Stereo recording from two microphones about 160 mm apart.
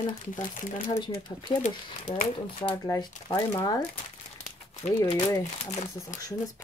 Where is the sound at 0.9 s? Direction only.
25° left (ahead or behind).